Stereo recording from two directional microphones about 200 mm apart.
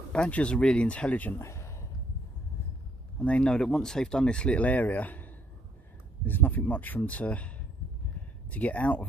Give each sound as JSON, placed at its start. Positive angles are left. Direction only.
{"t": 0.1, "sound": "speech", "side_deg": 5}
{"t": 3.2, "sound": "speech", "side_deg": 5}